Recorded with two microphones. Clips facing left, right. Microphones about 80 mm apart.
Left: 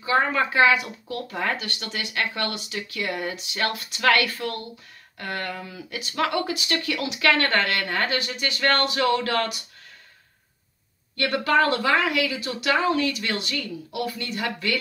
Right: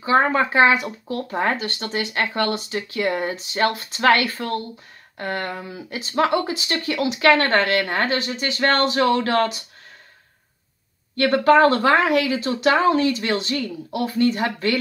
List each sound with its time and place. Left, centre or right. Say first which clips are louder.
0.0 s speech: right 4 dB; right
11.1 s speech: right 6 dB; right